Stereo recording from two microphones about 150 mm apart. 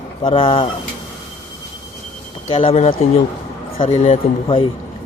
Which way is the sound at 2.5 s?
35° left (ahead or behind).